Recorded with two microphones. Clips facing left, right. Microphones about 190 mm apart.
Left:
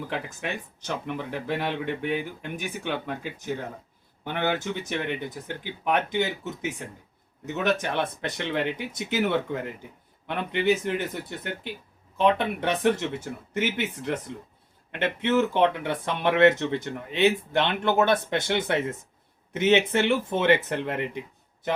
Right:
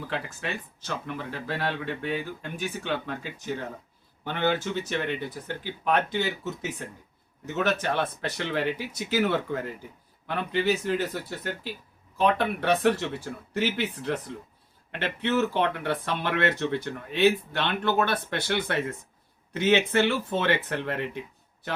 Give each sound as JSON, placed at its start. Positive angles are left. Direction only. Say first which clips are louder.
{"t": 0.1, "sound": "speech", "louder": "left 1 dB", "side_deg": 15}
{"t": 16.3, "sound": "speech", "louder": "left 7 dB", "side_deg": 20}